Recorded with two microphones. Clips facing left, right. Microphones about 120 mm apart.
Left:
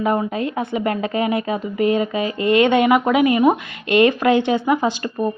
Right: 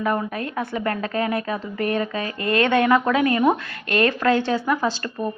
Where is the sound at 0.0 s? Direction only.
20° left (ahead or behind).